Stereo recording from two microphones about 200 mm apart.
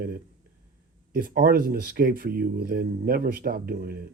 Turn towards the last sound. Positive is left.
turn(degrees=-50)  # may be behind; listen again after turning